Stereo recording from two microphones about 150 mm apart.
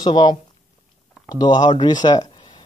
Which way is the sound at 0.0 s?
30° left (ahead or behind).